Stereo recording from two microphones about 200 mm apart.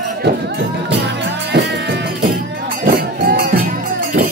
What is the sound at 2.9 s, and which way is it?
Music, 50° right (ahead or behind).